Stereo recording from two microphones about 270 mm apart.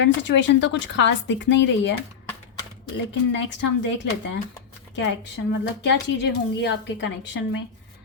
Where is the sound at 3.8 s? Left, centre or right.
Left.